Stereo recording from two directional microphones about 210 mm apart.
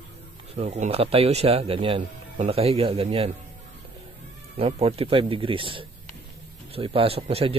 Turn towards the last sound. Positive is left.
turn(degrees=-30)  # may be behind; listen again after turning